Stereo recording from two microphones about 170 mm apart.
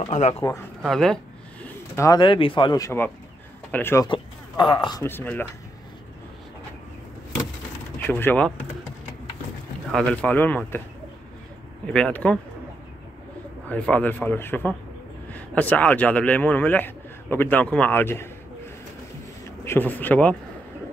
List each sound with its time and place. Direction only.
0.0 s speech: 40° left (ahead or behind)
0.4 s a man's voice: 15° left (ahead or behind)
0.8 s a sound: 5° left (ahead or behind)
2.0 s a man's voice: 25° left (ahead or behind)
4.1 s a sound: 30° left (ahead or behind)
5.0 s a man's voice: 10° left (ahead or behind)
8.1 s a man's voice: 10° left (ahead or behind)
9.8 s a man's voice: 5° left (ahead or behind)
11.8 s a man's voice: 5° left (ahead or behind)
13.7 s a man's voice: 10° left (ahead or behind)
19.6 s speech: 15° left (ahead or behind)